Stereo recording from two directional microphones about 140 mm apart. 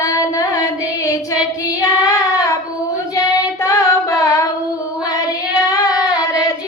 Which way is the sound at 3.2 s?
25° left (ahead or behind).